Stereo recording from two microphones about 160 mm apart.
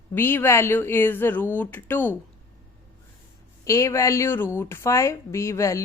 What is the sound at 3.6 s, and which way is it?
Speech, 20° left (ahead or behind).